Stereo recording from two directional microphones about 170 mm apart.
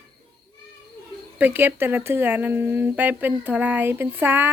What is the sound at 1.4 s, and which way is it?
Speech, 10° right (ahead or behind).